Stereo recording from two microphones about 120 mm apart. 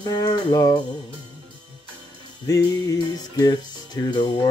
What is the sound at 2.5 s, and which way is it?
Music, 30° left (ahead or behind).